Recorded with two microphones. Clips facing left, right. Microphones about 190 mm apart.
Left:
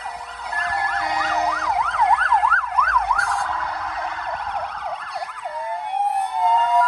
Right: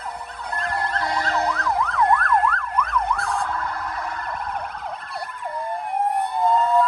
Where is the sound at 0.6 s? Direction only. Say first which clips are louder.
Even; 5° left (ahead or behind).